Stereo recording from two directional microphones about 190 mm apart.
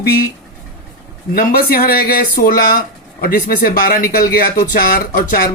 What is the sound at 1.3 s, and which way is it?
Speech, 50° left (ahead or behind).